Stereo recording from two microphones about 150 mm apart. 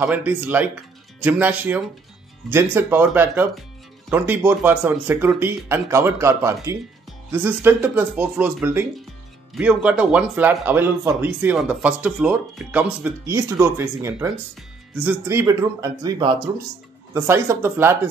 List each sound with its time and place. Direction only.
0.0 s speech: 15° right (ahead or behind)
13.3 s a man's voice: 20° right (ahead or behind)